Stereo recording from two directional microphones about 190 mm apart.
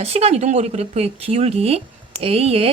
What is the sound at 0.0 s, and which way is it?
Speech, 35° right (ahead or behind).